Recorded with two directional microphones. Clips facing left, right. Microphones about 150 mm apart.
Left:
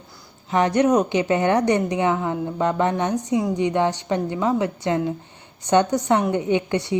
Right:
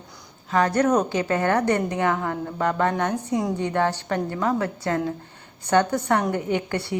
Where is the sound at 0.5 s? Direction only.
15° left (ahead or behind).